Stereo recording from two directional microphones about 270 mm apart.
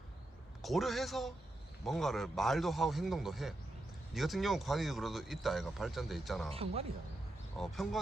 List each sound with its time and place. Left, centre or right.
0.6 s speech: centre
6.5 s speech: right
7.6 s speech: centre